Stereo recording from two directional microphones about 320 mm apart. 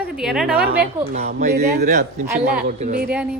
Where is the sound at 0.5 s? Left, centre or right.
Right.